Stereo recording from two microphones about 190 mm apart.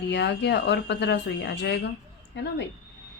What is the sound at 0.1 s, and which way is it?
A woman's voice, 65° left (ahead or behind).